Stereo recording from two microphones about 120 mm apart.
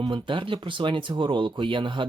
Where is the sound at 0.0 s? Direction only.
45° right (ahead or behind).